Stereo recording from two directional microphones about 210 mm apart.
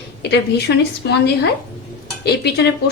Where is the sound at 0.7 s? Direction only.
60° left (ahead or behind).